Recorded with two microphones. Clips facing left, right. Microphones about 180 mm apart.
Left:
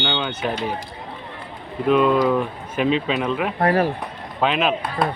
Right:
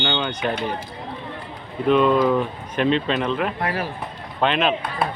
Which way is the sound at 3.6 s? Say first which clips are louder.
Left 7 dB; 45° left (ahead or behind).